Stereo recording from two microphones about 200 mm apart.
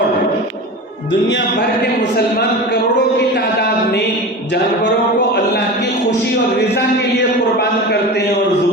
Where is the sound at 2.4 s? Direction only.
55° left (ahead or behind).